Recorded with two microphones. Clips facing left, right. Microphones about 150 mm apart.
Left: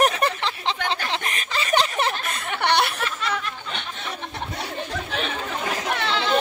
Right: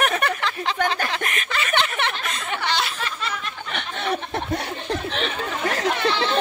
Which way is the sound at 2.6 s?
60° left (ahead or behind).